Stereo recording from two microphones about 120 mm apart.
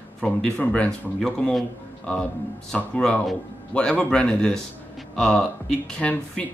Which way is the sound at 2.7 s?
10° left (ahead or behind).